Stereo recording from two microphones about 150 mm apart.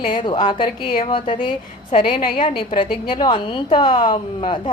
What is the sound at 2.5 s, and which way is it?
A woman's voice, 35° left (ahead or behind).